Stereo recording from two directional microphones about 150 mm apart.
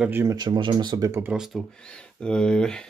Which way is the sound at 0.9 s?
20° right (ahead or behind).